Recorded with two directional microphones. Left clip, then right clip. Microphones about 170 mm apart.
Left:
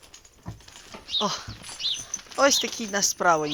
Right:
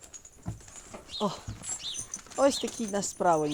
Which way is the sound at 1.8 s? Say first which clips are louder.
Left 11 dB; 90° right.